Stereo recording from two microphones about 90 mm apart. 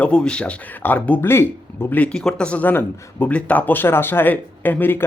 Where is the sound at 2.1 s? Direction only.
10° left (ahead or behind).